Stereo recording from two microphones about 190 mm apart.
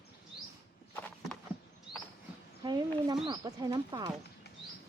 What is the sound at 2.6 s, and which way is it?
Speech, 20° right (ahead or behind).